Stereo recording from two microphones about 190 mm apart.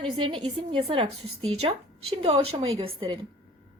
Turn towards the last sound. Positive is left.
turn(degrees=-25)  # may be behind; listen again after turning